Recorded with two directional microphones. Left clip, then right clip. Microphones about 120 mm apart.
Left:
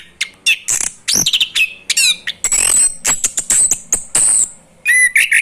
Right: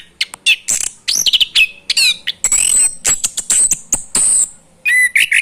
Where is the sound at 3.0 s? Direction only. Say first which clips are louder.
Even; 35° right (ahead or behind).